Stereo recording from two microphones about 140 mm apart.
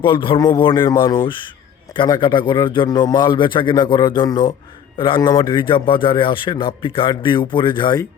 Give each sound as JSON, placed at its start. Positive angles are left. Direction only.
{"t": 0.0, "sound": "a man's voice", "side_deg": 35}